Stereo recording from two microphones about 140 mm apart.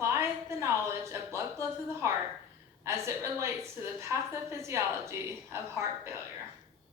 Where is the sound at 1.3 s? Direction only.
20° right (ahead or behind).